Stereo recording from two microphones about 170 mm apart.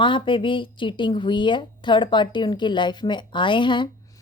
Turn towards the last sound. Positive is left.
turn(degrees=30)  # may be behind; listen again after turning